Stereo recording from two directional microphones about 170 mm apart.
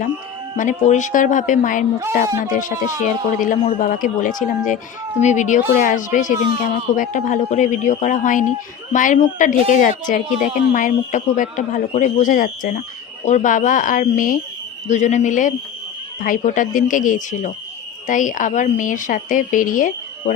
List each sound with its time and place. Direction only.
0.5 s speech: 50° left (ahead or behind)